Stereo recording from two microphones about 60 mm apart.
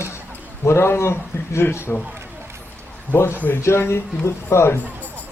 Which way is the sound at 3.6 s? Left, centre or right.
Left.